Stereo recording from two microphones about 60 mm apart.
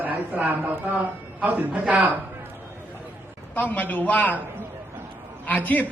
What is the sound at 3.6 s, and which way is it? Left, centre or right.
Speech, left.